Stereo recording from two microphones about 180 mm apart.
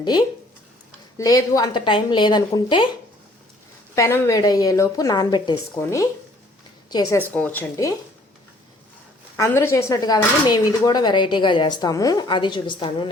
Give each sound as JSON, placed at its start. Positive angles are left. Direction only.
{"t": 0.0, "sound": "speech", "side_deg": 25}
{"t": 3.9, "sound": "a woman's voice", "side_deg": 15}
{"t": 9.3, "sound": "speech", "side_deg": 10}